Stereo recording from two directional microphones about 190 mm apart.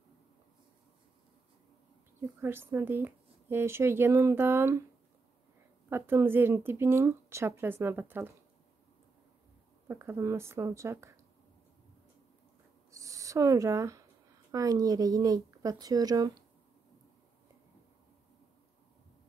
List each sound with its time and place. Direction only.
2.1 s speech: 10° right (ahead or behind)
5.9 s speech: 10° right (ahead or behind)
9.8 s speech: 15° right (ahead or behind)
12.9 s a sound: 15° right (ahead or behind)
14.5 s speech: 20° right (ahead or behind)